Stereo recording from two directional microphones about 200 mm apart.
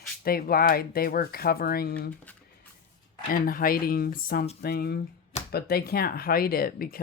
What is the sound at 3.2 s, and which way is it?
Speech, 45° left (ahead or behind).